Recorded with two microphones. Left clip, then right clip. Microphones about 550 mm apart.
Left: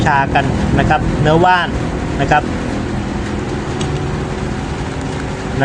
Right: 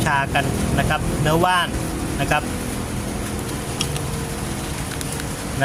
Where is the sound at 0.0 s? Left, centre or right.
Right.